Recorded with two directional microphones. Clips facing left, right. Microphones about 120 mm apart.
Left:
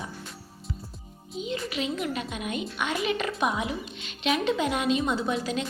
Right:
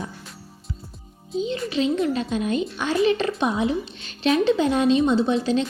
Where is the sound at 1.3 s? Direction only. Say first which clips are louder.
Right 7 dB; 30° right (ahead or behind).